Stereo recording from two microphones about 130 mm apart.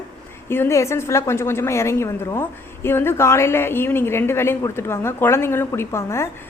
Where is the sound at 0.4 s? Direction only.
20° left (ahead or behind).